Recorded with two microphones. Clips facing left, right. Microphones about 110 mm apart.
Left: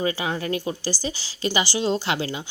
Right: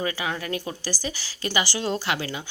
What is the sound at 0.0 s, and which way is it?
A woman's voice, 25° left (ahead or behind).